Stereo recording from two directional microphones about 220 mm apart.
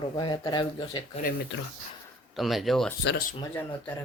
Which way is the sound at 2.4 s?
Centre (ahead or behind).